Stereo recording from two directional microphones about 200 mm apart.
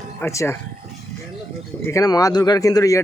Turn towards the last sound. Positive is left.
turn(degrees=15)  # may be behind; listen again after turning